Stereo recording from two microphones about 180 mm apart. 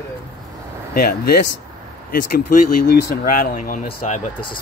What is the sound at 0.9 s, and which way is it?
Speech, 55° left (ahead or behind).